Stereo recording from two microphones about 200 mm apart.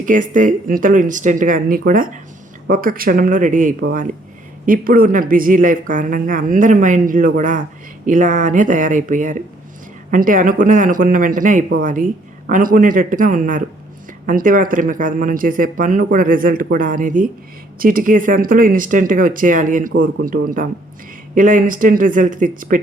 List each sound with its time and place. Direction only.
0.0 s speech: 40° right (ahead or behind)